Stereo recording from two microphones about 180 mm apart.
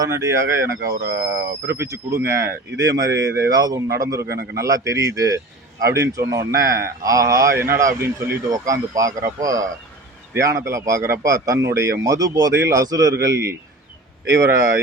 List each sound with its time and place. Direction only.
0.0 s a man's voice: 15° right (ahead or behind)
4.2 s a man's voice: 60° right (ahead or behind)
4.5 s a man's voice: 20° right (ahead or behind)